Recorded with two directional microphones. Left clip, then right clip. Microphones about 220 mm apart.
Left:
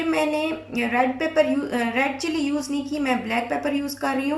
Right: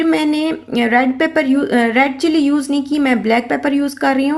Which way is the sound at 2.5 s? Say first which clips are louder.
Right 9 dB; 60° right (ahead or behind).